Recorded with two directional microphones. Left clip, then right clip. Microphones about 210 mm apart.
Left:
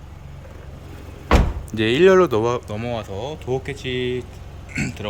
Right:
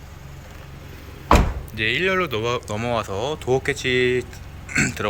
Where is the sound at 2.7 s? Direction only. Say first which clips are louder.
Right 3 dB; 10° left (ahead or behind).